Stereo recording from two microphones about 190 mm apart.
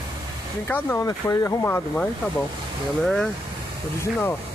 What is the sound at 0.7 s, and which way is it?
Speech, 10° left (ahead or behind).